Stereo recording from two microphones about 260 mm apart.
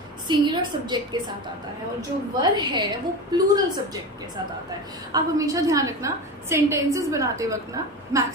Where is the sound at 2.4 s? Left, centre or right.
Centre.